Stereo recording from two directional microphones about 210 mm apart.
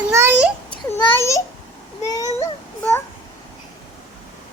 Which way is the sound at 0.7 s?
10° left (ahead or behind).